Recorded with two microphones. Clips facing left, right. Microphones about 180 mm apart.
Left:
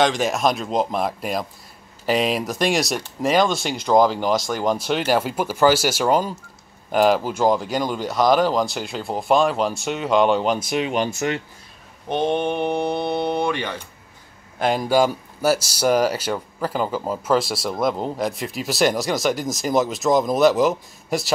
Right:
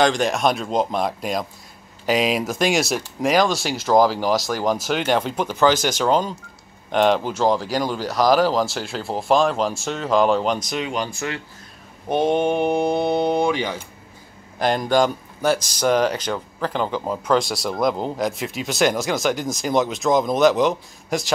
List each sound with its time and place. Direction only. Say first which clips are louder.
0.0 s speech: right 1 dB; centre (ahead or behind)
10.6 s speech: left 3 dB; 25° left (ahead or behind)
12.1 s speech: right 2 dB; 10° right (ahead or behind)
14.6 s speech: even; 5° left (ahead or behind)